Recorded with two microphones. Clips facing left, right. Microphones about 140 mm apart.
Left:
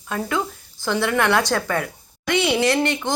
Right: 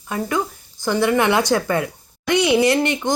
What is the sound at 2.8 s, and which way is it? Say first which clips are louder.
Speech: right 1 dB; 15° right (ahead or behind).